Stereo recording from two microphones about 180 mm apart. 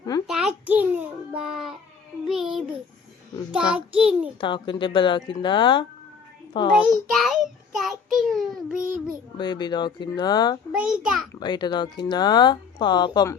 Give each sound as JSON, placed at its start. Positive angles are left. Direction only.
{"t": 0.3, "sound": "a sound", "side_deg": -5}
{"t": 1.4, "sound": "child singing", "side_deg": -5}
{"t": 2.2, "sound": "music", "side_deg": 0}
{"t": 3.5, "sound": "child singing", "side_deg": -5}
{"t": 4.4, "sound": "a child's voice", "side_deg": 25}
{"t": 7.1, "sound": "child singing", "side_deg": 0}
{"t": 8.8, "sound": "child singing", "side_deg": -50}
{"t": 9.4, "sound": "speech", "side_deg": 25}
{"t": 10.7, "sound": "child singing", "side_deg": -5}
{"t": 11.3, "sound": "speech", "side_deg": 25}